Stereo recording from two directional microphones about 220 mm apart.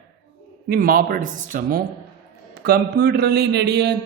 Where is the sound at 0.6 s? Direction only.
45° right (ahead or behind).